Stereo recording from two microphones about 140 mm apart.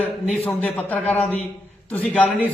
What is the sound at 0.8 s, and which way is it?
A man's voice, 10° left (ahead or behind).